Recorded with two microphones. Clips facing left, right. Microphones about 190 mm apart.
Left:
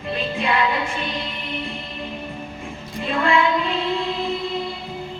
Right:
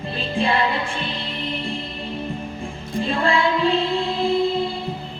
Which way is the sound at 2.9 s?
30° right (ahead or behind).